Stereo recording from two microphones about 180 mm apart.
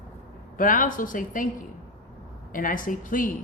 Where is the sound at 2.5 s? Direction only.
50° left (ahead or behind).